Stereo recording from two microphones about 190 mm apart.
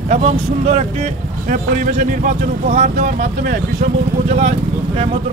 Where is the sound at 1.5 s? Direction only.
45° right (ahead or behind).